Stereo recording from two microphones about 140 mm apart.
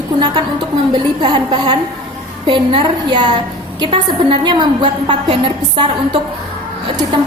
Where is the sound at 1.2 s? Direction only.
35° right (ahead or behind).